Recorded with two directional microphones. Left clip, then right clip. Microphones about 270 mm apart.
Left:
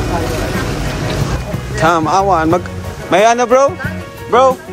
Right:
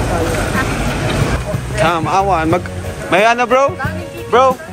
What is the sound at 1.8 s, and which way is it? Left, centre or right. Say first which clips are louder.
Speech: left 2 dB; centre.